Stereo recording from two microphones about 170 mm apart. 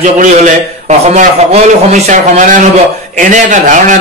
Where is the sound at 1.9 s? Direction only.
40° right (ahead or behind).